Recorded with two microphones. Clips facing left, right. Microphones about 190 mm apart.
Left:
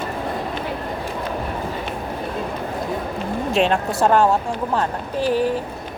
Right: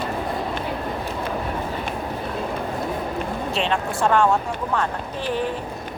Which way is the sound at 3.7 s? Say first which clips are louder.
Left 3 dB; 40° left (ahead or behind).